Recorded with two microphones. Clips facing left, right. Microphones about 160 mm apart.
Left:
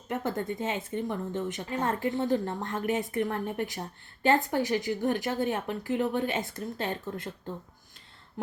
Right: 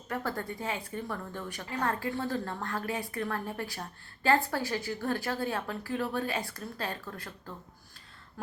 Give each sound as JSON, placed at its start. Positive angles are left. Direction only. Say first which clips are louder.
{"t": 0.1, "sound": "a woman's voice", "louder": "left 4 dB", "side_deg": 20}